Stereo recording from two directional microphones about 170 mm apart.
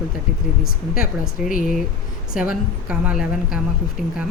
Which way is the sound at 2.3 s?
5° right (ahead or behind).